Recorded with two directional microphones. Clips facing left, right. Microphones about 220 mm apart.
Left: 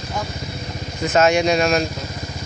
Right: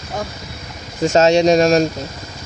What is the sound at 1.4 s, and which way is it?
Speech, 40° right (ahead or behind).